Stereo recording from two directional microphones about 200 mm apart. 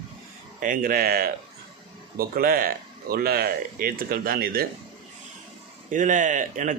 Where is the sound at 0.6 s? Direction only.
45° right (ahead or behind).